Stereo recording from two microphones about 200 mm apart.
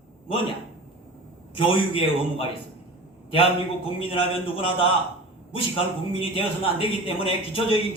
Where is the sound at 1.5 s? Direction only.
25° left (ahead or behind).